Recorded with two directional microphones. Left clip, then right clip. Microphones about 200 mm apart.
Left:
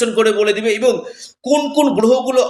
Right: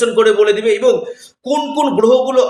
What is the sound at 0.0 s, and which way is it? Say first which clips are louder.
Speech: right 3 dB; 40° left (ahead or behind).